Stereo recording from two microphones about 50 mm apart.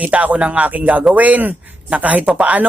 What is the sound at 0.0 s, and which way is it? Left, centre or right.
A man's voice, right.